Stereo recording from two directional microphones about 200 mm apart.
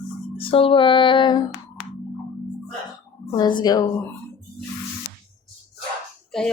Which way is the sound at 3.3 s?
20° left (ahead or behind).